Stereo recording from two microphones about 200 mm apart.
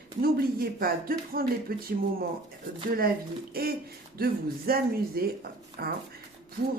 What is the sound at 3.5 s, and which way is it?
Speech, 50° right (ahead or behind).